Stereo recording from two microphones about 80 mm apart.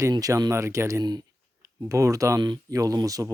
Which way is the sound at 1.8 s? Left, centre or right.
Right.